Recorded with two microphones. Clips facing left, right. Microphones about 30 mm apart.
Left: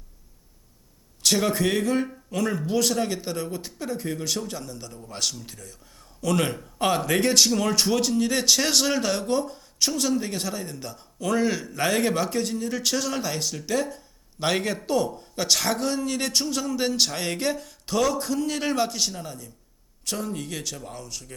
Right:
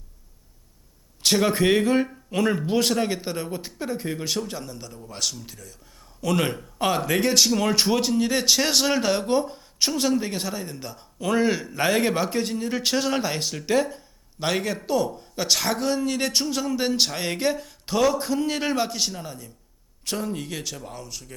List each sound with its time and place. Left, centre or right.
1.2 s speech: centre
6.2 s speech: centre
14.3 s speech: centre